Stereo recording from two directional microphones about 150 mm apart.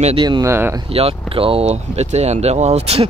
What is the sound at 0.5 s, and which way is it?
Speech, 15° right (ahead or behind).